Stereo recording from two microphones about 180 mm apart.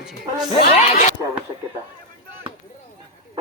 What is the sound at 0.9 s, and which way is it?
Speech, 40° left (ahead or behind).